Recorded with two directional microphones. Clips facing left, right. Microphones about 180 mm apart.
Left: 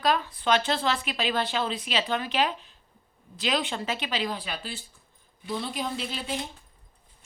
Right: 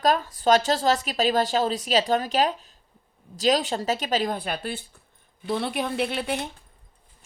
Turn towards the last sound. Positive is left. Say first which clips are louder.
# right 6 dB
turn(degrees=-60)  # may be behind; listen again after turning